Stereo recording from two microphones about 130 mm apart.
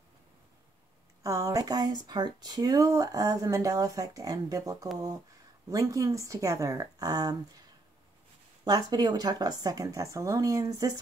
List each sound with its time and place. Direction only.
1.2 s speech: 25° right (ahead or behind)
8.6 s speech: 30° right (ahead or behind)